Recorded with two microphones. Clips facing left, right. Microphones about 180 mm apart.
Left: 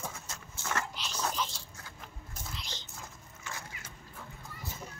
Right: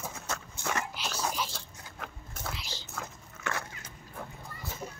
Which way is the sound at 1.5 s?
70° right (ahead or behind).